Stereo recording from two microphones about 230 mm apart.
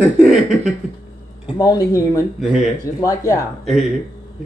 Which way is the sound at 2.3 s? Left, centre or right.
Centre.